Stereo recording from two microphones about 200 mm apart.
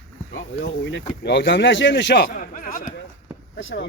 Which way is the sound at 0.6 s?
65° left (ahead or behind).